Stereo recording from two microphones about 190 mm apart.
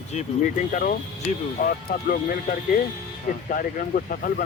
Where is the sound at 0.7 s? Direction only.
45° left (ahead or behind).